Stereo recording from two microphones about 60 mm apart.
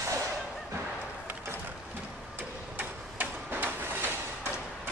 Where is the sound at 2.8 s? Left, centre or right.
Right.